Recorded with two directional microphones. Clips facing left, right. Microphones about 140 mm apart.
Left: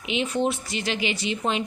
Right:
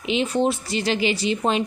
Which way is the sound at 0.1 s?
35° right (ahead or behind).